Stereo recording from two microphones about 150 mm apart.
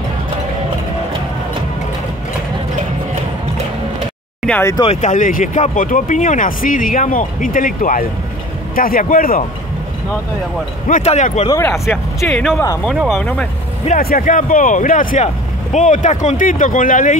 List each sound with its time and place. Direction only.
4.5 s speech: 15° left (ahead or behind)
4.8 s speech: 50° left (ahead or behind); by 9.4 s 75° left (ahead or behind)
11.0 s speech: 45° left (ahead or behind)
11.4 s speech: 20° left (ahead or behind)
12.2 s speech: centre (ahead or behind)
12.9 s speech: 5° right (ahead or behind)
13.9 s speech: 70° left (ahead or behind)
15.2 s speech: 55° left (ahead or behind)